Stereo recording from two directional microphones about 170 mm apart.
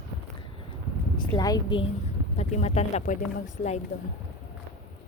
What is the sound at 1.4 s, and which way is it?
Speech, 20° left (ahead or behind).